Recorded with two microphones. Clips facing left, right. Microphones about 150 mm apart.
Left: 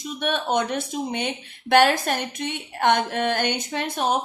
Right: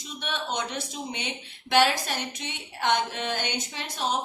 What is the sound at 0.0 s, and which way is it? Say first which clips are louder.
A woman's voice: left 8 dB; 50° left (ahead or behind).